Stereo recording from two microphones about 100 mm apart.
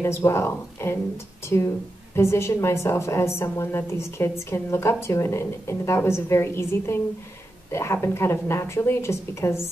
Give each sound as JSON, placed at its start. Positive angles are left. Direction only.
{"t": 0.0, "sound": "a woman's voice", "side_deg": 25}